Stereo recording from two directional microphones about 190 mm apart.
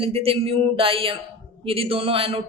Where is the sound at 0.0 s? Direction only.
30° right (ahead or behind).